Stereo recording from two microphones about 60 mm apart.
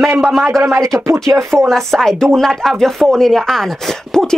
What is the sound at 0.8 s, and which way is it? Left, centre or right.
Speech, right.